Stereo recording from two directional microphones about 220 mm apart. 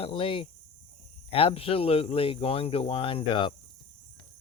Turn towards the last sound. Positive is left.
turn(degrees=25)  # may be behind; listen again after turning